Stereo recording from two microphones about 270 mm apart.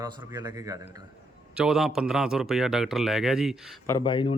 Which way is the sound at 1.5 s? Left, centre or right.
Centre.